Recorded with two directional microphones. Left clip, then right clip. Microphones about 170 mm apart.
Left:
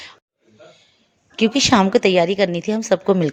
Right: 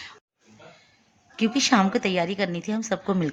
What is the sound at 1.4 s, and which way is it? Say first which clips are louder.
Speech: left 6 dB; 45° left (ahead or behind).